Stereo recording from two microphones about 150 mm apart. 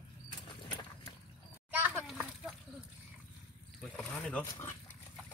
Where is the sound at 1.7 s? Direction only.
15° right (ahead or behind).